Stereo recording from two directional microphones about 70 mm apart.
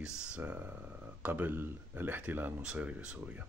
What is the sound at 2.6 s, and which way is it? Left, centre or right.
Speech, centre.